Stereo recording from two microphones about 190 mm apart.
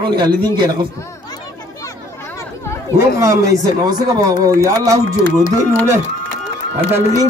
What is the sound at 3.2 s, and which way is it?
Speech, 15° right (ahead or behind).